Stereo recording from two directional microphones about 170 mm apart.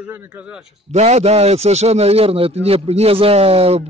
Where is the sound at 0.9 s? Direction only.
40° right (ahead or behind).